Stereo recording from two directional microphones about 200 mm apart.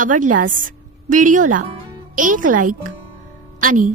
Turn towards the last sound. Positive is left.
turn(degrees=-40)  # may be behind; listen again after turning